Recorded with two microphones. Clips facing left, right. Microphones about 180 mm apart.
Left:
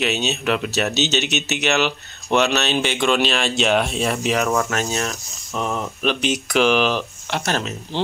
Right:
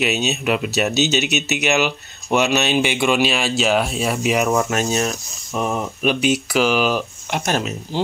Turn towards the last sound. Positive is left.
turn(degrees=-15)  # may be behind; listen again after turning